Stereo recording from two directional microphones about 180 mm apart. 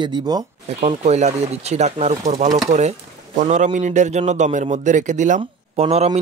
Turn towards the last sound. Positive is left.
turn(degrees=-35)  # may be behind; listen again after turning